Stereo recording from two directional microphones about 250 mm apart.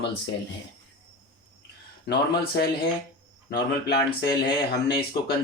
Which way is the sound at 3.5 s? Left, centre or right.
Left.